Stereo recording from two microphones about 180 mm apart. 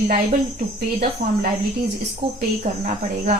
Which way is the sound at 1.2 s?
55° right (ahead or behind).